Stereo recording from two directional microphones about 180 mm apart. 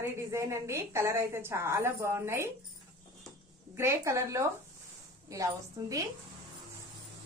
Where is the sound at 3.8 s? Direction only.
15° right (ahead or behind).